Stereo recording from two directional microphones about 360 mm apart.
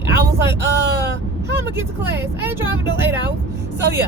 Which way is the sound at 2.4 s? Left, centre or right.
Centre.